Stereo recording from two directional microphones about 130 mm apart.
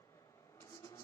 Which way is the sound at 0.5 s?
25° left (ahead or behind).